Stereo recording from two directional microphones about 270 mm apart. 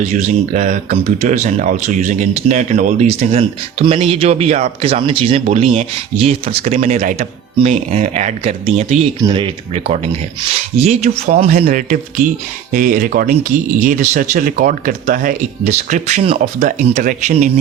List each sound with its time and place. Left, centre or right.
0.0 s speech: right